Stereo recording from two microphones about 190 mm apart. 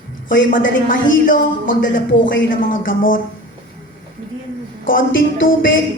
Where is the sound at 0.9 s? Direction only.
45° left (ahead or behind).